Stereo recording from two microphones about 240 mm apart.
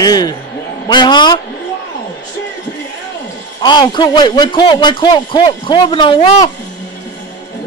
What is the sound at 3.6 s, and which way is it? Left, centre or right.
Speech, centre.